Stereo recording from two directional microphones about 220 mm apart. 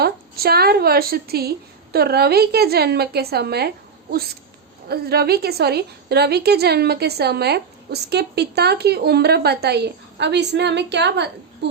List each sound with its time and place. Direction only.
0.0 s a woman's voice: 45° right (ahead or behind)
4.9 s a woman's voice: 45° right (ahead or behind)